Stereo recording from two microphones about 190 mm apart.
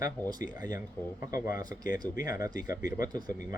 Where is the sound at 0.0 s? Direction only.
20° right (ahead or behind).